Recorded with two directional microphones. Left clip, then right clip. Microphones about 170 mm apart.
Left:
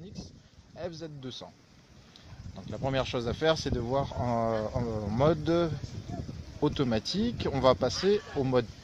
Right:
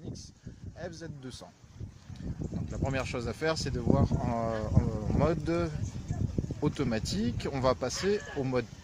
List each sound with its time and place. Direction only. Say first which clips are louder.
0.7 s speech: left 3 dB; 20° left (ahead or behind)
2.7 s speech: left 4 dB; 25° left (ahead or behind)